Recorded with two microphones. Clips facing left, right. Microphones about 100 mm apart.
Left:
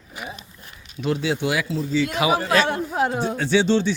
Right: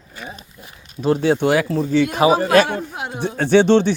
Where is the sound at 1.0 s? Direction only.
40° right (ahead or behind); by 2.1 s 60° right (ahead or behind).